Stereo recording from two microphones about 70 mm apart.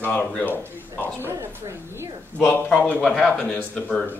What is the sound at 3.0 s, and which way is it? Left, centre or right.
Speech, centre.